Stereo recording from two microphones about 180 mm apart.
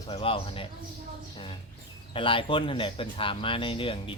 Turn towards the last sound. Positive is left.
turn(degrees=30)  # may be behind; listen again after turning